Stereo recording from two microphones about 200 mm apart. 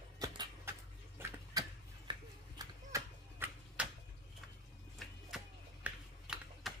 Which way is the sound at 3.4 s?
10° right (ahead or behind).